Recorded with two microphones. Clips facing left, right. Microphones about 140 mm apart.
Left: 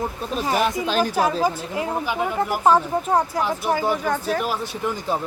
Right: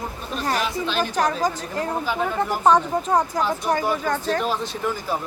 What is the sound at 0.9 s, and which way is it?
Speech, 40° left (ahead or behind).